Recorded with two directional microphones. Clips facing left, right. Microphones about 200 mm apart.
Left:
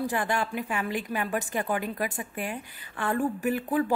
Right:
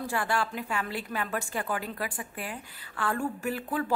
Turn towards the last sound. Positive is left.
turn(degrees=20)  # may be behind; listen again after turning